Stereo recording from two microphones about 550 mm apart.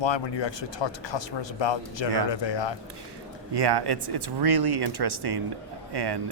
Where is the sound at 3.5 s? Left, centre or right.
Right.